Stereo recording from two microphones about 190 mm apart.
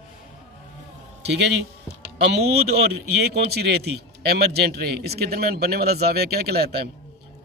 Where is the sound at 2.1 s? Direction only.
60° right (ahead or behind).